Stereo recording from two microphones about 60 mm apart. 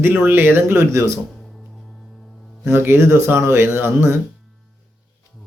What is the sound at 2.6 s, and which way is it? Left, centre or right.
Speech, right.